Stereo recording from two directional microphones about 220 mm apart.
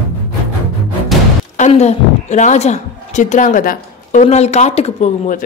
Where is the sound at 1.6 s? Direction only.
30° left (ahead or behind).